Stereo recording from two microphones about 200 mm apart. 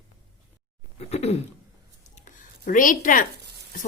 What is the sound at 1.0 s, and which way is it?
Speech, 30° left (ahead or behind).